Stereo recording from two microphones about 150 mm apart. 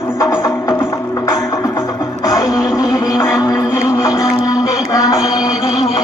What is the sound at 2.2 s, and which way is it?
Music, 20° left (ahead or behind).